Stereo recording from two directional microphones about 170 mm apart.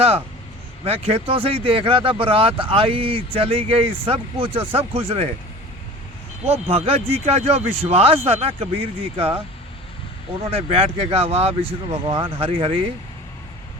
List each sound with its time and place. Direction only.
0.9 s speech: 35° right (ahead or behind)
6.5 s speech: 35° right (ahead or behind)
10.4 s speech: 35° right (ahead or behind)